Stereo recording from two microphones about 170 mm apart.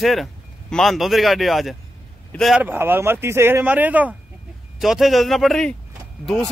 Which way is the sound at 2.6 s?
10° right (ahead or behind).